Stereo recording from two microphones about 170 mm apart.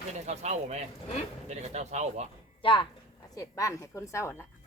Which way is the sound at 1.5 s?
40° right (ahead or behind).